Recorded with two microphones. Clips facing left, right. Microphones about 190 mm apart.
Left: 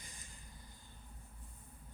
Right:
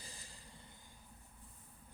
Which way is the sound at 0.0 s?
35° right (ahead or behind).